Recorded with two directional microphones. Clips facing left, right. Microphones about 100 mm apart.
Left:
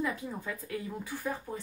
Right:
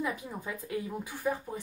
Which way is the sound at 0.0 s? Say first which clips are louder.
Left 1 dB; 15° right (ahead or behind).